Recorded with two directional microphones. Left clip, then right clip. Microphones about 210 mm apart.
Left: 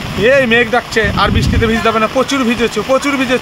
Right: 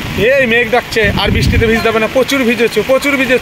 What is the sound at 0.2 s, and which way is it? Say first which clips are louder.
Speech: even; 10° left (ahead or behind).